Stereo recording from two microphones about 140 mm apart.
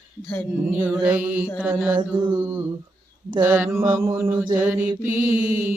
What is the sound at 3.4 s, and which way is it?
Mantra, 15° right (ahead or behind).